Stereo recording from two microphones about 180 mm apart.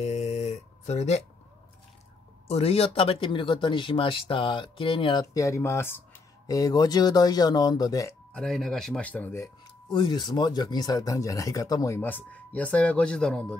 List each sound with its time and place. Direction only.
0.0 s a sound: 35° left (ahead or behind)
2.4 s speech: 35° left (ahead or behind); by 8.2 s 20° left (ahead or behind)
8.3 s speech: 5° left (ahead or behind)